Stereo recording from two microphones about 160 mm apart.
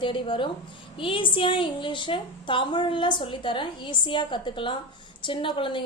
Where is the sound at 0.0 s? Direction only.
30° left (ahead or behind).